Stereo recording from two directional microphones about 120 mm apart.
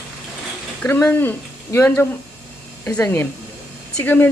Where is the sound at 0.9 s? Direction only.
20° left (ahead or behind).